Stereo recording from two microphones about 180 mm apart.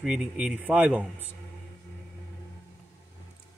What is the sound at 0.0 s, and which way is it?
Speech, centre (ahead or behind).